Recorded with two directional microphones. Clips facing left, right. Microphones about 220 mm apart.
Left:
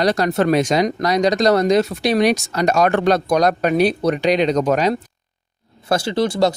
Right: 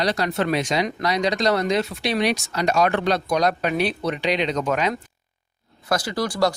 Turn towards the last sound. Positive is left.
turn(degrees=25)  # may be behind; listen again after turning